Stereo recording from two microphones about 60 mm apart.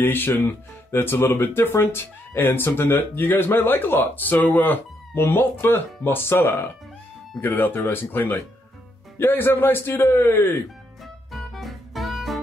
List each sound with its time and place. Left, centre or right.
0.0 s speech: left
11.3 s music: centre